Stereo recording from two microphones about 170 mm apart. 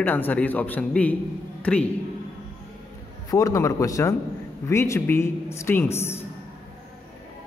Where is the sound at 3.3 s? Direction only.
20° left (ahead or behind).